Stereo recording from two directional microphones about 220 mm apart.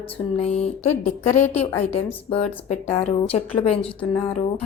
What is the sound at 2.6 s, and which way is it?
Speech, 30° left (ahead or behind).